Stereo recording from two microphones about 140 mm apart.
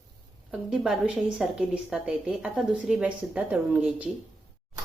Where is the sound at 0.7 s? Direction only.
5° right (ahead or behind).